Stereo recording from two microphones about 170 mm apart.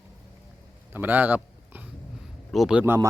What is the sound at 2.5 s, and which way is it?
Speech, 5° right (ahead or behind).